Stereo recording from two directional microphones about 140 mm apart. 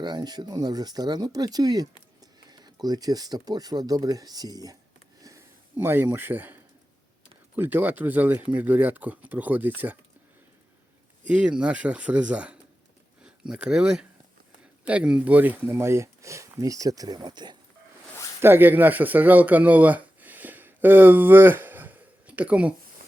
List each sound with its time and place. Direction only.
0.0 s speech: 30° right (ahead or behind)
5.2 s a sound: 20° right (ahead or behind)
7.5 s speech: 15° right (ahead or behind)
11.3 s speech: 5° right (ahead or behind); by 17.6 s 30° right (ahead or behind)
18.3 s speech: 15° right (ahead or behind)